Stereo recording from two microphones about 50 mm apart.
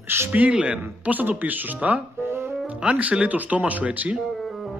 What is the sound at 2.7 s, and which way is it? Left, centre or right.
Speech, right.